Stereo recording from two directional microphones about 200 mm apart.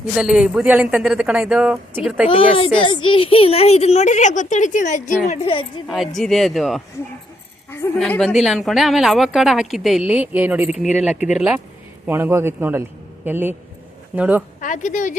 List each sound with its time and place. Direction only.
0.2 s a woman's voice: 5° right (ahead or behind)
2.2 s a woman's voice: 25° left (ahead or behind)
5.3 s a woman's voice: 30° left (ahead or behind)
5.9 s a woman's voice: centre (ahead or behind)
7.9 s a woman's voice: 5° left (ahead or behind)
14.6 s a woman's voice: 40° left (ahead or behind)